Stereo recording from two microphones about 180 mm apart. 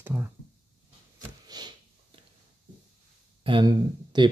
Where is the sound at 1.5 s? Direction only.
20° right (ahead or behind).